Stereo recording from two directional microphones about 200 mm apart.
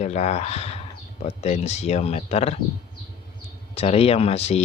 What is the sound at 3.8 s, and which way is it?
Speech, 30° left (ahead or behind).